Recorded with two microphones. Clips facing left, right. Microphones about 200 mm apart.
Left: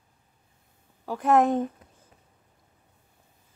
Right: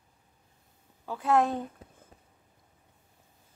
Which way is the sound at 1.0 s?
15° left (ahead or behind).